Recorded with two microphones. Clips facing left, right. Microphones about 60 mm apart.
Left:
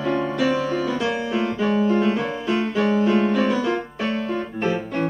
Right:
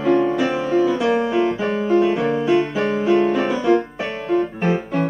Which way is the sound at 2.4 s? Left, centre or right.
Centre.